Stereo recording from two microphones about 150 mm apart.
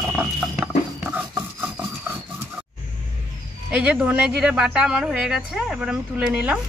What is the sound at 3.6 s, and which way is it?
Speech, 10° right (ahead or behind).